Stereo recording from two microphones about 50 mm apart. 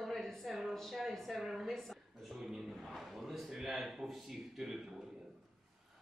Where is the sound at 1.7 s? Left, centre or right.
Centre.